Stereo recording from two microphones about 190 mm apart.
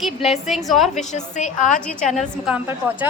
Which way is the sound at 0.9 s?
40° left (ahead or behind).